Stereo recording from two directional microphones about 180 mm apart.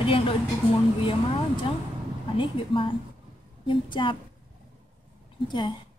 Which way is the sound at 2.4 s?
30° left (ahead or behind).